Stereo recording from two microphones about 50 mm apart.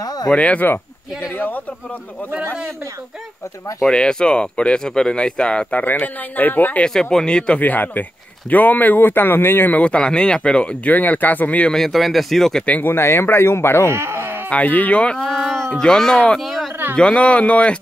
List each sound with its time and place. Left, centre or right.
0.3 s speech: left
1.3 s a sound: left
3.9 s speech: centre
5.8 s speech: left
6.9 s speech: centre
7.6 s speech: left
9.8 s speech: left
11.7 s speech: centre
12.8 s speech: left
13.8 s speech: right
14.5 s speech: left
15.2 s a sound: centre
16.3 s speech: centre
16.9 s speech: left